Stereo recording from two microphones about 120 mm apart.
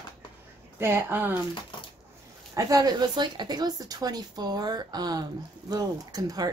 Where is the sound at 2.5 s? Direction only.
30° right (ahead or behind).